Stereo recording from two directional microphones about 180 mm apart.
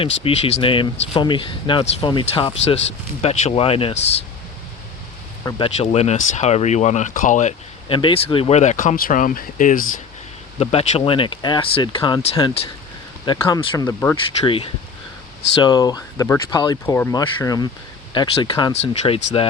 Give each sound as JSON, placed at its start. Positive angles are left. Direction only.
{"t": 0.0, "sound": "speech", "side_deg": 30}
{"t": 5.5, "sound": "speech", "side_deg": 30}
{"t": 7.9, "sound": "speech", "side_deg": 30}
{"t": 10.6, "sound": "speech", "side_deg": 35}